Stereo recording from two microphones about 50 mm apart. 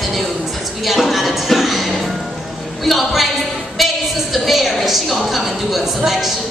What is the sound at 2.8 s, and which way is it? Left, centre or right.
Speech, centre.